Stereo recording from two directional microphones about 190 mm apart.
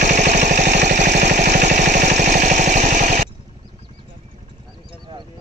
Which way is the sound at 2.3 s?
40° right (ahead or behind).